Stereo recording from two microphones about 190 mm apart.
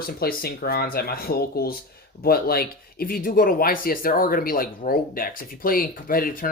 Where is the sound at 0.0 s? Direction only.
50° left (ahead or behind).